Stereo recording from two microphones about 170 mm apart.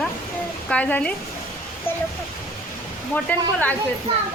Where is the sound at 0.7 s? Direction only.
10° left (ahead or behind).